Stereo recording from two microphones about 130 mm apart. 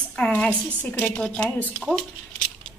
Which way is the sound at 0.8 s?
10° left (ahead or behind).